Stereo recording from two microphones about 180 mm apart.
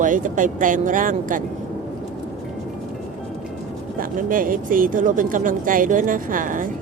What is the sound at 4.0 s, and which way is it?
Speech, 50° right (ahead or behind).